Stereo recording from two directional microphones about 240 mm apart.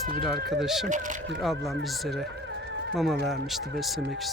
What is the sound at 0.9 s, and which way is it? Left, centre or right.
Speech, right.